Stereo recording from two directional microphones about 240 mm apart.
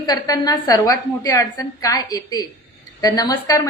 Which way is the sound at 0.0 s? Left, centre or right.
Centre.